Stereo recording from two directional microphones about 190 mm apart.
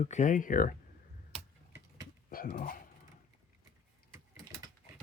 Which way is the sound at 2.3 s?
50° left (ahead or behind).